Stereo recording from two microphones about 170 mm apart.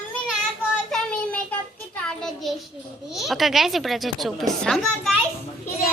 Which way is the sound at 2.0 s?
Centre (ahead or behind).